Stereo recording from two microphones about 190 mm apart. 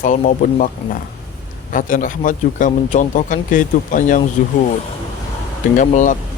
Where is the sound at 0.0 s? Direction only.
40° left (ahead or behind).